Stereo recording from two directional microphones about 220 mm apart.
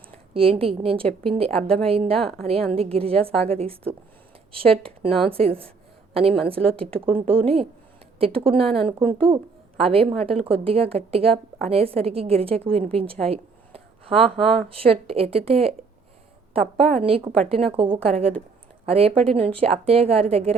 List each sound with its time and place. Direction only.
0.1 s a woman's voice: 25° right (ahead or behind)
13.2 s a sound: 25° right (ahead or behind)
14.5 s a woman's voice: 25° right (ahead or behind)
16.9 s a woman's voice: 25° right (ahead or behind)